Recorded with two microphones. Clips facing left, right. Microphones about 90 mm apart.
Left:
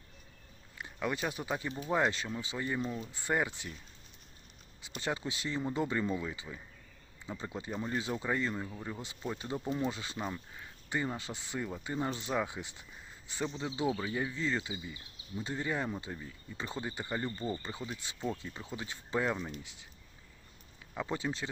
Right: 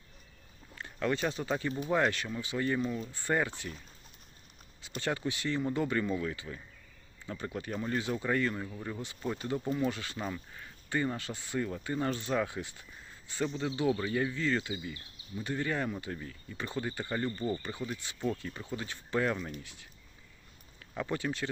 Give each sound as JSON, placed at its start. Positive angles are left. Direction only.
{"t": 0.8, "sound": "speech", "side_deg": 15}
{"t": 4.9, "sound": "speech", "side_deg": 20}
{"t": 9.0, "sound": "speech", "side_deg": 20}
{"t": 20.9, "sound": "speech", "side_deg": 15}